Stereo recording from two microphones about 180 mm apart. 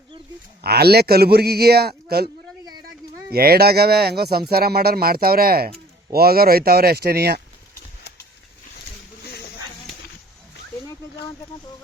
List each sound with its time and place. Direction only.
0.6 s speech: 60° right (ahead or behind)
3.3 s speech: 60° right (ahead or behind)